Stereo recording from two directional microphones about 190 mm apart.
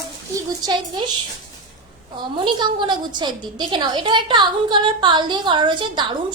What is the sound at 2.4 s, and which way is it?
A woman's voice, 25° right (ahead or behind).